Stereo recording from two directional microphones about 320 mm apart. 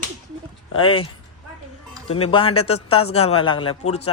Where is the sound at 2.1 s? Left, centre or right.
Centre.